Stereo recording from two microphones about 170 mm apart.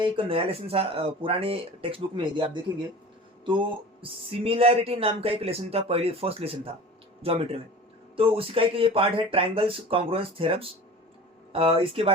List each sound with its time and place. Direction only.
0.0 s speech: 30° right (ahead or behind)